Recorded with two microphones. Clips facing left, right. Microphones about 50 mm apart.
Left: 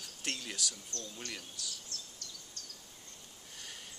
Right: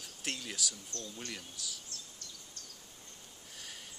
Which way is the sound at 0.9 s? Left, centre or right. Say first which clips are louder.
Even; right.